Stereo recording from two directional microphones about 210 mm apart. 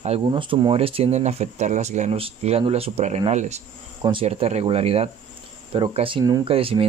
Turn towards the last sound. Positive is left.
turn(degrees=-25)  # may be behind; listen again after turning